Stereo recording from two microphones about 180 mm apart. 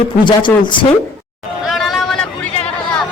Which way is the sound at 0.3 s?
25° left (ahead or behind).